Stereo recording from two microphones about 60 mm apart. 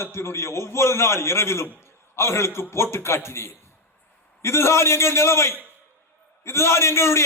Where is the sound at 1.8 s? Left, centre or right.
Left.